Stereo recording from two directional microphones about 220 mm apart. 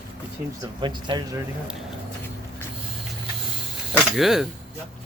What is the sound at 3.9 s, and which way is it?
Speech, centre (ahead or behind).